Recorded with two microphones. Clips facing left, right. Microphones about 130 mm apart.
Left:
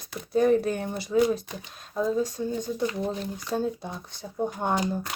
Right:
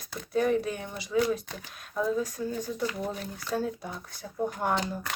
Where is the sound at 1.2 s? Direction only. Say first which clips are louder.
Left 3 dB; 25° left (ahead or behind).